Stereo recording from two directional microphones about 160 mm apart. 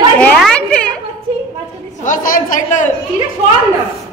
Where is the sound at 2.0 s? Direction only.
55° left (ahead or behind).